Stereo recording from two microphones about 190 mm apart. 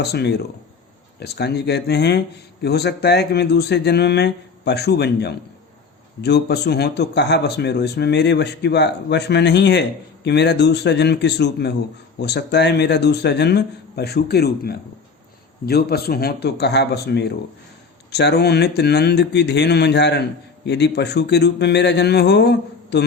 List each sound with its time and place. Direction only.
0.0 s speech: 60° left (ahead or behind)